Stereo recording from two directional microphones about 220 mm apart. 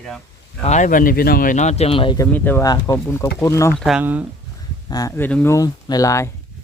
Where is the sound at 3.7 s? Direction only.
Centre (ahead or behind).